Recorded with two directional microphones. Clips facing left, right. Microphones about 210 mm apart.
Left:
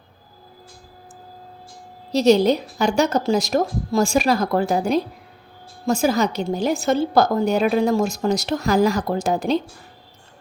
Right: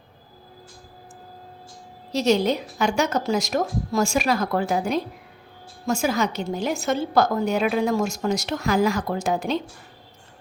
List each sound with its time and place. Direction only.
2.1 s a woman's voice: 35° left (ahead or behind)